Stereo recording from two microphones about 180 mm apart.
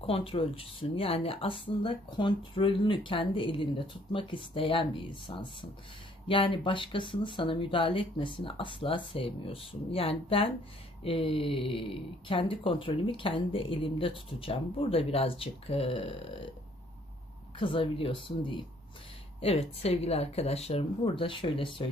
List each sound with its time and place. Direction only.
0.0 s speech: 30° left (ahead or behind)
17.6 s speech: 30° left (ahead or behind)